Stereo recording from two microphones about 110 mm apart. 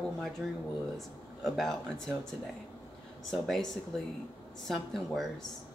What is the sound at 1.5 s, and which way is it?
Speech, 5° left (ahead or behind).